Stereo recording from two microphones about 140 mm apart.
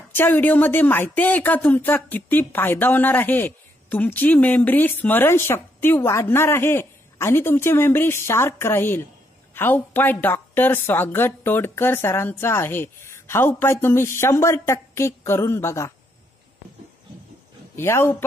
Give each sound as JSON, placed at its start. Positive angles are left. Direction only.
{"t": 0.1, "sound": "speech", "side_deg": 15}
{"t": 17.7, "sound": "speech", "side_deg": 15}